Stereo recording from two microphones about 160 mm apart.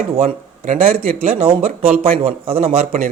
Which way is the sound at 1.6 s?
65° right (ahead or behind).